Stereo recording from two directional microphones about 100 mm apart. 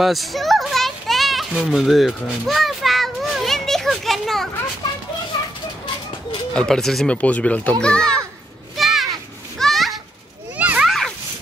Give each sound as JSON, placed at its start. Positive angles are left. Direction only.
{"t": 0.0, "sound": "children playing", "side_deg": 0}
{"t": 1.5, "sound": "speech", "side_deg": -10}
{"t": 2.4, "sound": "a sound", "side_deg": 0}
{"t": 6.5, "sound": "speech", "side_deg": 5}
{"t": 7.2, "sound": "speech", "side_deg": 15}
{"t": 8.7, "sound": "children playing", "side_deg": 0}
{"t": 10.6, "sound": "children playing", "side_deg": -15}
{"t": 10.9, "sound": "children playing", "side_deg": 0}